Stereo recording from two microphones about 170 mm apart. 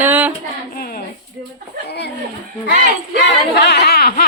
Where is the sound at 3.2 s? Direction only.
80° left; by 4.3 s 65° left (ahead or behind).